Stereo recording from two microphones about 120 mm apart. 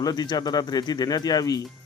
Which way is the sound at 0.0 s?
35° left (ahead or behind).